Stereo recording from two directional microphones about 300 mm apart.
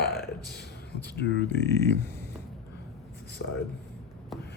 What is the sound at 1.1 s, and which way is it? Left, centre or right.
Speech, left.